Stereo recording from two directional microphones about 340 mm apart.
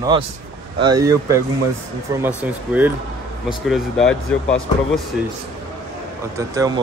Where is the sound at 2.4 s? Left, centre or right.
Centre.